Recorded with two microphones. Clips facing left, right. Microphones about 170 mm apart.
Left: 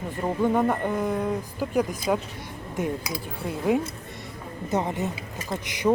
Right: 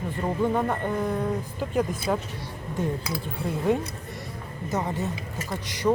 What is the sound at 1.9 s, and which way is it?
Speech, 15° left (ahead or behind).